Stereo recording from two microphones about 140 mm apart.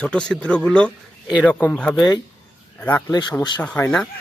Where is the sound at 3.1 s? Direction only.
30° left (ahead or behind).